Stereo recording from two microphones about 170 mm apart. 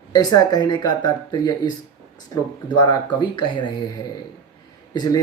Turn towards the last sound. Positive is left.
turn(degrees=25)  # may be behind; listen again after turning